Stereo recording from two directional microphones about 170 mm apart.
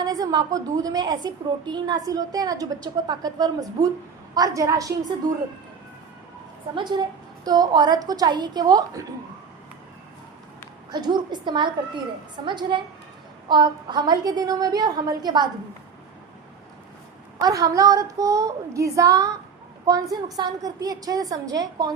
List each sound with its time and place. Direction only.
0.0 s a woman's voice: 20° right (ahead or behind)
6.7 s a woman's voice: 25° right (ahead or behind)
10.9 s a woman's voice: 25° right (ahead or behind)
17.3 s a woman's voice: 20° right (ahead or behind)